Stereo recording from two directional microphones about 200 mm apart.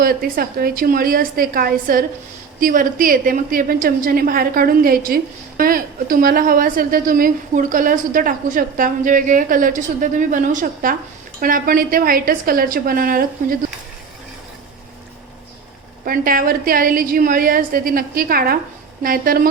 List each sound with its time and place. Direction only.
0.0 s a woman's voice: 50° right (ahead or behind)
16.0 s a woman's voice: 45° right (ahead or behind)